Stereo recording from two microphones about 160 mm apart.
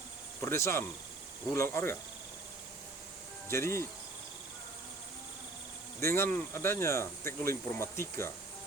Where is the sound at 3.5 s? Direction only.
15° left (ahead or behind).